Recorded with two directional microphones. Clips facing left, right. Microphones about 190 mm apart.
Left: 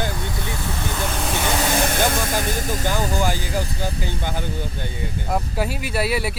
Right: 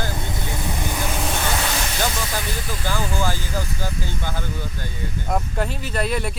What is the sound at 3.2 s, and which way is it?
Speech, 15° left (ahead or behind).